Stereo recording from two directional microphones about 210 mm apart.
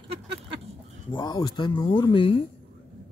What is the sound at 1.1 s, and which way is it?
Speech, 20° left (ahead or behind).